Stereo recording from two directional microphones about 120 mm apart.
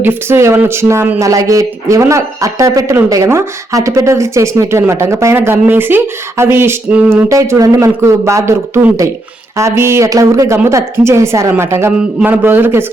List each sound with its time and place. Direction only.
0.0 s speech: 20° right (ahead or behind)